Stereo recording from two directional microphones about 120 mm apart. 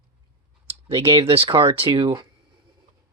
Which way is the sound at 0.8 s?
50° right (ahead or behind).